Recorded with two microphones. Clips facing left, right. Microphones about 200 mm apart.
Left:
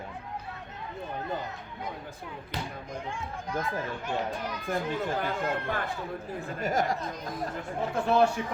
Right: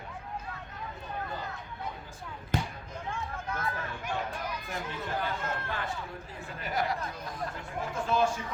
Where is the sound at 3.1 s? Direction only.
15° left (ahead or behind).